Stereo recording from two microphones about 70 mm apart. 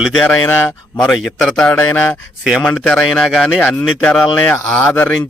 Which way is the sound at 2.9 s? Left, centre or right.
Centre.